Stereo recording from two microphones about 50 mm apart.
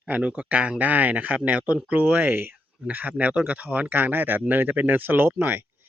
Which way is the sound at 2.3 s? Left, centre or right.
Right.